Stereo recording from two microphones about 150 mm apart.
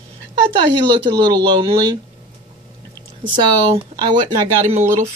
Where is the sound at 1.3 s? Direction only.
30° right (ahead or behind).